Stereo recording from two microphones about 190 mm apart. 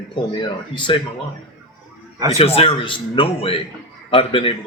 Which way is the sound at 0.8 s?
25° left (ahead or behind).